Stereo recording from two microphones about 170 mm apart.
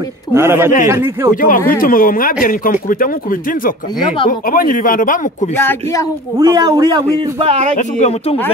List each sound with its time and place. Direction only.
0.3 s a man's voice: 15° right (ahead or behind)
1.3 s speech: 55° left (ahead or behind)
5.6 s a woman's voice: 15° left (ahead or behind)
6.3 s speech: 20° right (ahead or behind)
7.3 s speech: 35° right (ahead or behind)
8.0 s speech: 40° left (ahead or behind)